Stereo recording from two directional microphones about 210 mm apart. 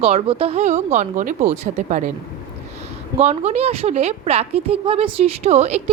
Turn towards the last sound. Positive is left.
turn(degrees=-30)  # may be behind; listen again after turning